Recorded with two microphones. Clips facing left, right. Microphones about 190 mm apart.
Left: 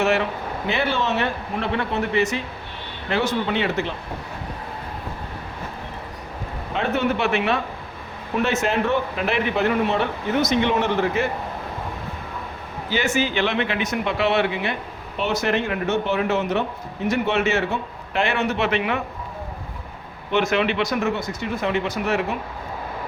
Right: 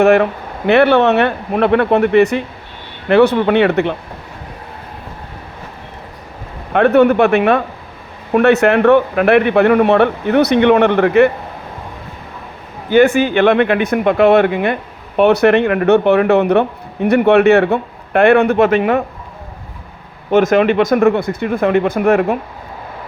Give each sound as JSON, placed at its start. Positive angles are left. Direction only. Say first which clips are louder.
{"t": 0.0, "sound": "speech", "louder": "right 10 dB", "side_deg": -55}
{"t": 6.7, "sound": "speech", "louder": "right 13 dB", "side_deg": -60}
{"t": 12.9, "sound": "speech", "louder": "right 12 dB", "side_deg": -55}
{"t": 20.3, "sound": "speech", "louder": "right 10 dB", "side_deg": -45}